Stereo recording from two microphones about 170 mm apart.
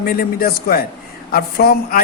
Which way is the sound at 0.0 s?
60° left (ahead or behind).